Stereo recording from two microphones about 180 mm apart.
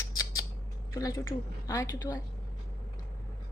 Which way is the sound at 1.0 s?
20° left (ahead or behind).